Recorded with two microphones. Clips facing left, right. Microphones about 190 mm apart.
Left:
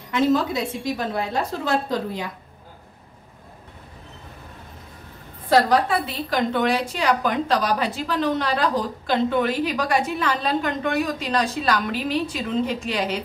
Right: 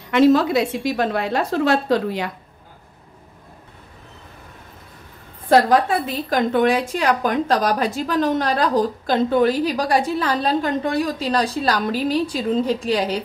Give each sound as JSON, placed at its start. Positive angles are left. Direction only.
{"t": 0.1, "sound": "a woman's voice", "side_deg": -75}
{"t": 5.5, "sound": "a woman's voice", "side_deg": -45}